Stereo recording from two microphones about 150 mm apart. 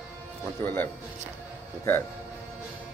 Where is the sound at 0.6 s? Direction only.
15° left (ahead or behind).